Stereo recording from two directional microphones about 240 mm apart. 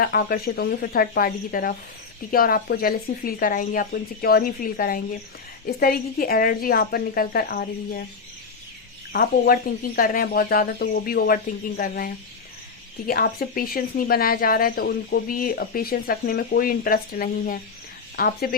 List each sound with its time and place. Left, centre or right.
0.0 s a woman's voice: left
9.1 s a woman's voice: left